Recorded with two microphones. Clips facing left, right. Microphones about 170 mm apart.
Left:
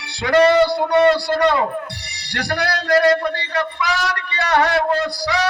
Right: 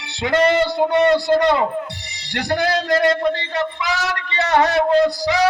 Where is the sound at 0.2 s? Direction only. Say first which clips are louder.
Left 3 dB; 20° right (ahead or behind).